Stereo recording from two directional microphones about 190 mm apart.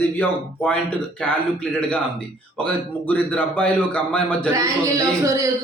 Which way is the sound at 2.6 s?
5° left (ahead or behind).